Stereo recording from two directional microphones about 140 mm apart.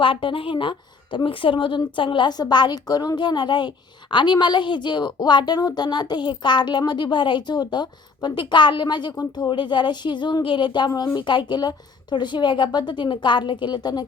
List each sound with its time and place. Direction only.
0.0 s a woman's voice: 40° left (ahead or behind)